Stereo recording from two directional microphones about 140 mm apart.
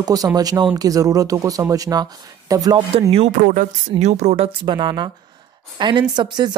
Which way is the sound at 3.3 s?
70° right (ahead or behind).